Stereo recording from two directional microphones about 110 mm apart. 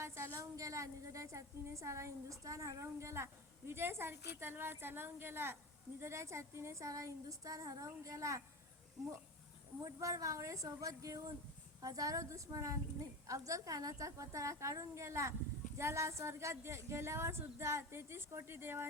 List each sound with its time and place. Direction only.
0.0 s a woman's voice: 25° right (ahead or behind)
9.8 s a woman's voice: 30° right (ahead or behind)